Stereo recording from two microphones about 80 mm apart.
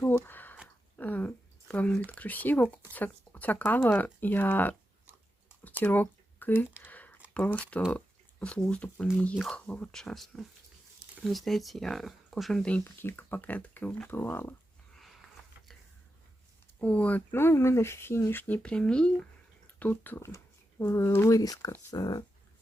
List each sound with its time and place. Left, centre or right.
0.3 s a sound: left
2.0 s speech: centre
5.8 s speech: left
6.8 s a sound: left
7.3 s speech: centre
7.9 s a sound: centre
8.7 s speech: centre
12.8 s speech: left
16.8 s speech: centre
19.8 s speech: left
20.2 s speech: left
21.3 s speech: left